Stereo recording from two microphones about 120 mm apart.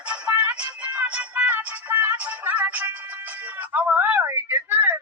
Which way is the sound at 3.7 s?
10° right (ahead or behind).